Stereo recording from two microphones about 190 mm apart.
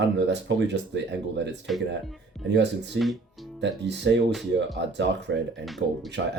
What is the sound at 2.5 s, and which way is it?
Speech, 65° right (ahead or behind).